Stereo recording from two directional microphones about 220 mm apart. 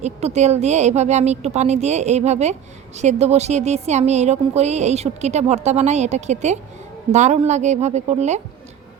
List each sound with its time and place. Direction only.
0.0 s a woman's voice: 30° right (ahead or behind)